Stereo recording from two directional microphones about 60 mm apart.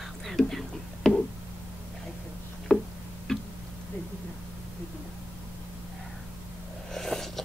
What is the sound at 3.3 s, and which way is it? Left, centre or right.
Tick-tock, centre.